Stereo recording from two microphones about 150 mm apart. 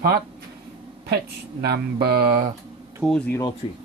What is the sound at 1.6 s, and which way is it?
Mantra, 90° right.